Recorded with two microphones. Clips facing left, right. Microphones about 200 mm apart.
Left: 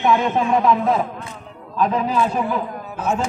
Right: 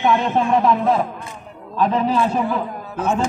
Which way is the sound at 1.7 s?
30° right (ahead or behind).